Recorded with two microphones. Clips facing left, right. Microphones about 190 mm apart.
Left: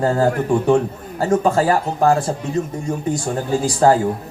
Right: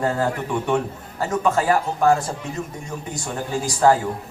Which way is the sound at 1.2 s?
30° left (ahead or behind).